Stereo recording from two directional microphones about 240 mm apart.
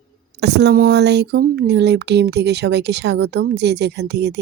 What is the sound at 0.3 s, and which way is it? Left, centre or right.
Speech, right.